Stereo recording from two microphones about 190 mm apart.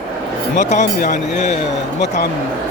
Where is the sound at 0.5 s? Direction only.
40° left (ahead or behind).